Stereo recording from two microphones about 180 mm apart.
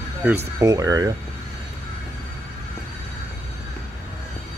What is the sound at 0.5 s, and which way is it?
Speech, 20° right (ahead or behind).